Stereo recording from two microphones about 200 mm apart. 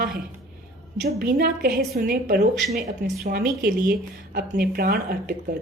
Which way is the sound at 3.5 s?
45° right (ahead or behind).